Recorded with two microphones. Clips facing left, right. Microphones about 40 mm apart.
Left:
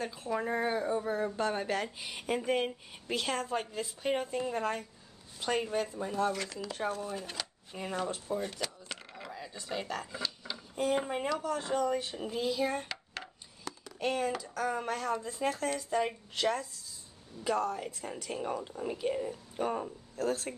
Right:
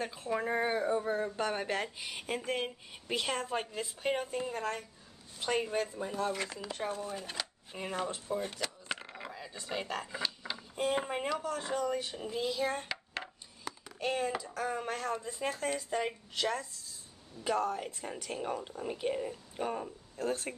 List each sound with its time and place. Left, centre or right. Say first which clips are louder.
0.0 s speech: even; centre
2.0 s speech: left 3 dB; centre
2.9 s speech: left 1 dB; centre
4.1 s a woman's voice: left 3 dB; centre
5.4 s speech: left 1 dB; centre
6.3 s speech: even; centre
6.7 s speech: left 4 dB; centre
9.0 s a sound: even; centre
10.8 s speech: left 2 dB; centre
12.2 s a sound: left 2 dB; centre
14.9 s speech: left 2 dB; centre
17.4 s speech: even; centre
19.5 s speech: left 3 dB; centre
20.2 s speech: left 2 dB; centre